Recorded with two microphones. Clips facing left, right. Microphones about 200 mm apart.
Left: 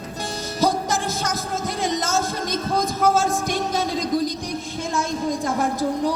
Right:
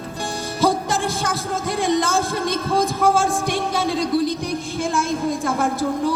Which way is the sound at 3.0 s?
45° left (ahead or behind).